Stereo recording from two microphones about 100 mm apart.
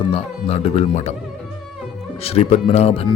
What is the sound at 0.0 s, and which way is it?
Speech, 75° left (ahead or behind).